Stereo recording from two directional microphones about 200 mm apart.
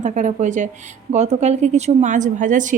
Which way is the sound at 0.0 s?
40° right (ahead or behind).